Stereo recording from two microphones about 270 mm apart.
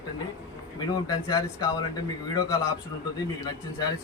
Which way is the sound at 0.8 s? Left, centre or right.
Centre.